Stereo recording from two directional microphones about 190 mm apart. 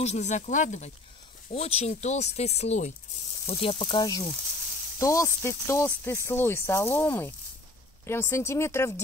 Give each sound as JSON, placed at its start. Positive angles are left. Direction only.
{"t": 0.0, "sound": "speech", "side_deg": 35}